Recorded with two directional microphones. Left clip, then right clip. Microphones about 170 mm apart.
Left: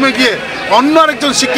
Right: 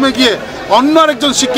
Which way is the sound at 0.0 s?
35° right (ahead or behind).